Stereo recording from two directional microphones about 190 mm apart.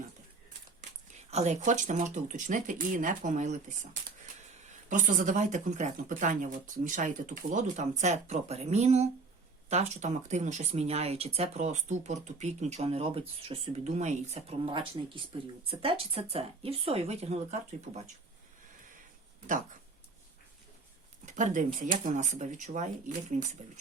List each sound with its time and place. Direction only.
1.3 s speech: 35° right (ahead or behind)
4.9 s speech: 40° right (ahead or behind)
21.2 s speech: 40° right (ahead or behind)